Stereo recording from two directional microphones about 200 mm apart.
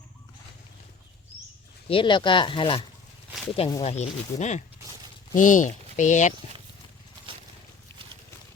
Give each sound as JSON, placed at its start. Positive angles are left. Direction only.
{"t": 1.9, "sound": "speech", "side_deg": 25}
{"t": 3.9, "sound": "speech", "side_deg": 35}